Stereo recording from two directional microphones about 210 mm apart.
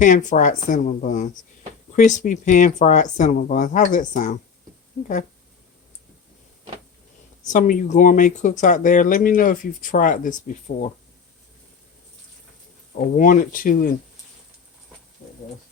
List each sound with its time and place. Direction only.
0.0 s speech: 35° left (ahead or behind)
7.4 s speech: 40° left (ahead or behind)
12.9 s speech: 40° left (ahead or behind)